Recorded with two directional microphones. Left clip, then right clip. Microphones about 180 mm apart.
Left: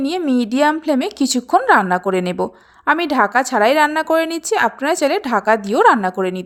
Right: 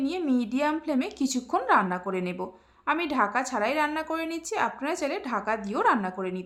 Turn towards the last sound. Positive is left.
turn(degrees=40)  # may be behind; listen again after turning